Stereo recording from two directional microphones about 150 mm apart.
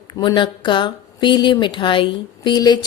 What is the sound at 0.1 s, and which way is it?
Speech, 30° left (ahead or behind).